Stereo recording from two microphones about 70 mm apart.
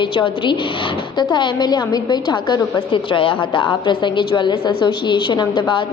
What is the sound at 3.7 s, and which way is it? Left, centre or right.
A woman's voice, left.